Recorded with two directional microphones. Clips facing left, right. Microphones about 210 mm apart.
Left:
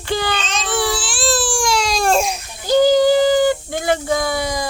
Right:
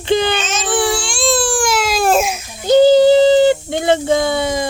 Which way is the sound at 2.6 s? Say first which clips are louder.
Right 4 dB; 25° right (ahead or behind).